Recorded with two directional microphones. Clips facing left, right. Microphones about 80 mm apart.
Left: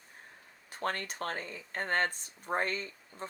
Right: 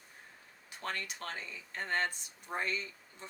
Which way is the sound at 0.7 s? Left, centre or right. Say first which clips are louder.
Left 5 dB; left.